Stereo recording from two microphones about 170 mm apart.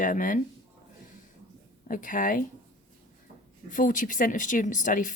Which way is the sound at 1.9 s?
50° left (ahead or behind).